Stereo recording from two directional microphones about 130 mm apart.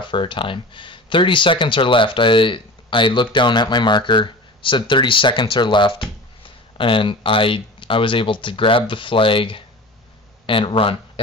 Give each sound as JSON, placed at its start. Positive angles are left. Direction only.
{"t": 0.0, "sound": "speech", "side_deg": 40}